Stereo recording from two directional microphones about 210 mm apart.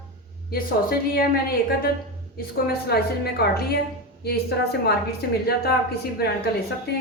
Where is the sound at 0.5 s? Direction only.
45° left (ahead or behind).